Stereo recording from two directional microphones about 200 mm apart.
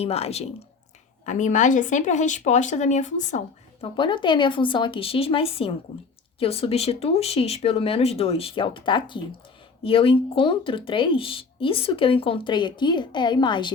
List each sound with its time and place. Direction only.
0.0 s speech: 30° left (ahead or behind)